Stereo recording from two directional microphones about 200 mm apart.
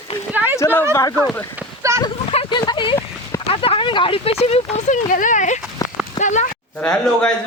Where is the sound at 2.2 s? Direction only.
30° left (ahead or behind).